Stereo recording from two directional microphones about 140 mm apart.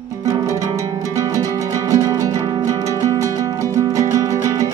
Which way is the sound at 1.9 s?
20° right (ahead or behind).